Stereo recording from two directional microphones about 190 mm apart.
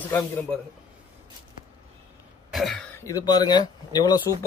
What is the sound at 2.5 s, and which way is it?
Cough, centre (ahead or behind).